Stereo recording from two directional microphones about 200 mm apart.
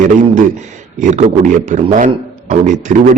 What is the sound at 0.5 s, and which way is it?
A man's voice, 35° right (ahead or behind).